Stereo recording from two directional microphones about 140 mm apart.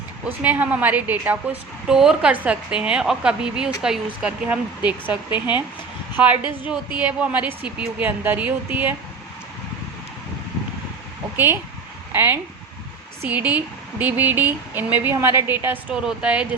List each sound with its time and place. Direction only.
0.3 s a woman's voice: 10° right (ahead or behind)
5.3 s speech: 35° left (ahead or behind)
6.1 s a woman's voice: 10° right (ahead or behind)
11.3 s a woman's voice: 15° right (ahead or behind)